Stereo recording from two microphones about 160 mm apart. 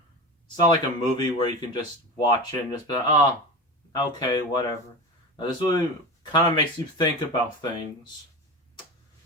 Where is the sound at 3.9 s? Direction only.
25° left (ahead or behind).